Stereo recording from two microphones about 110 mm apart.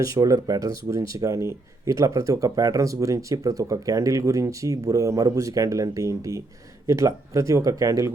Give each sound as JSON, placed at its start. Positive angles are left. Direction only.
{"t": 0.0, "sound": "speech", "side_deg": -30}